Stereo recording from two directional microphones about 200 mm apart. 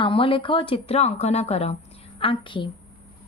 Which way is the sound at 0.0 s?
25° left (ahead or behind).